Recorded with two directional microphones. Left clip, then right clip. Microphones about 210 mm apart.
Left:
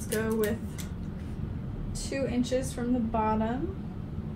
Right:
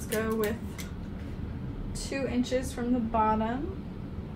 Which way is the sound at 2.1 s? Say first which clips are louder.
Even; 5° right (ahead or behind).